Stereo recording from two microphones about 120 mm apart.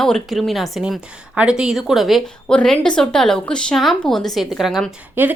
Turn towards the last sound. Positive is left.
turn(degrees=-15)  # may be behind; listen again after turning